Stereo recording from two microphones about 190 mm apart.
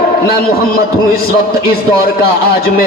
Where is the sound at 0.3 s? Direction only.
55° left (ahead or behind).